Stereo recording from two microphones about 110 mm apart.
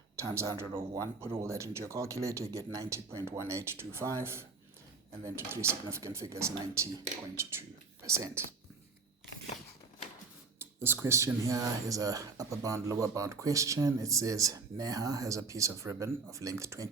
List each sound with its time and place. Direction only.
0.2 s speech: 25° right (ahead or behind)
8.0 s speech: 25° right (ahead or behind)
10.6 s speech: 20° right (ahead or behind)